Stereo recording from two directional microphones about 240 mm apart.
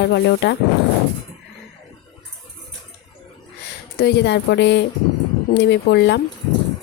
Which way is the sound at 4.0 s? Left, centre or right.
Left.